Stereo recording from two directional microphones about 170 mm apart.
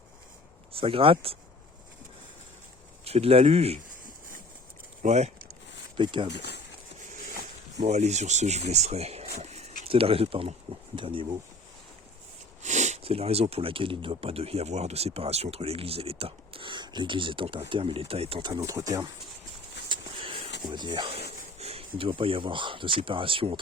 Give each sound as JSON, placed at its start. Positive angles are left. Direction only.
{"t": 0.7, "sound": "speech", "side_deg": -35}
{"t": 3.0, "sound": "speech", "side_deg": -35}
{"t": 5.0, "sound": "speech", "side_deg": -40}
{"t": 6.0, "sound": "speech", "side_deg": -30}
{"t": 6.3, "sound": "speech", "side_deg": 80}
{"t": 7.9, "sound": "speech", "side_deg": -40}
{"t": 9.4, "sound": "a sound", "side_deg": -40}
{"t": 9.8, "sound": "speech", "side_deg": -35}
{"t": 12.6, "sound": "speech", "side_deg": -45}
{"t": 19.9, "sound": "a sound", "side_deg": -30}
{"t": 20.7, "sound": "speech", "side_deg": -25}